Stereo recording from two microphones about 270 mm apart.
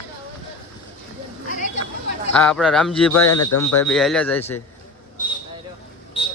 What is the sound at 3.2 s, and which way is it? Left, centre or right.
Speech, left.